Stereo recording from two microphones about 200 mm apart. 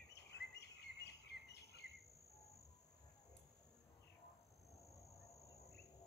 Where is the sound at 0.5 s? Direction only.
55° left (ahead or behind).